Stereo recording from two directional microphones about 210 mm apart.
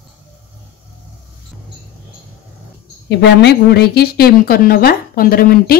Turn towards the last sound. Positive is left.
turn(degrees=45)  # may be behind; listen again after turning